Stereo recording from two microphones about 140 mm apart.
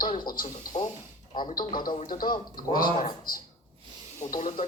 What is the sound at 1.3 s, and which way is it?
Speech, 35° left (ahead or behind).